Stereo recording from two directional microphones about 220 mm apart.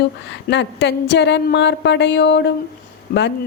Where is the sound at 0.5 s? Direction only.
55° left (ahead or behind).